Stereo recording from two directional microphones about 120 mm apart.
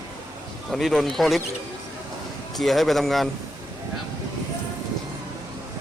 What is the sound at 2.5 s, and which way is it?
Speech, centre (ahead or behind).